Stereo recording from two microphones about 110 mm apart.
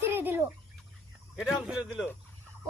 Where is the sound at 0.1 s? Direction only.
20° right (ahead or behind).